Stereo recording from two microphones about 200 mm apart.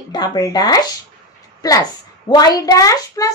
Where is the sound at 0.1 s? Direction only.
20° left (ahead or behind).